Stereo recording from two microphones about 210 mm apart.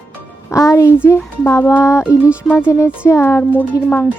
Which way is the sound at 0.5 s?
15° left (ahead or behind).